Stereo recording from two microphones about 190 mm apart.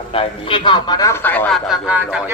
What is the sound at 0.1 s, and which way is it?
Speech, 25° left (ahead or behind).